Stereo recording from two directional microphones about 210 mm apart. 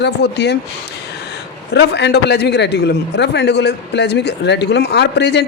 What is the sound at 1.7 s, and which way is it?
A man's voice, 55° left (ahead or behind).